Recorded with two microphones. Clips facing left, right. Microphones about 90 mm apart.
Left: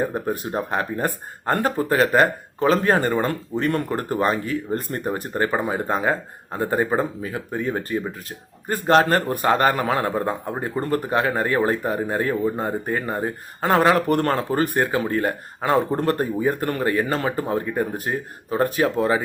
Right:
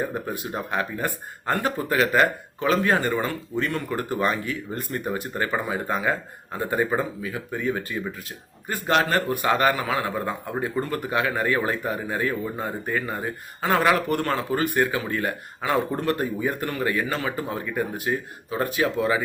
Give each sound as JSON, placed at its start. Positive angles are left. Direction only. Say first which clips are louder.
{"t": 0.0, "sound": "speech", "louder": "left 4 dB", "side_deg": 40}